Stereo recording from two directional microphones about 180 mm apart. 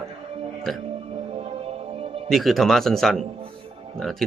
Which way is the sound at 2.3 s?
Centre (ahead or behind).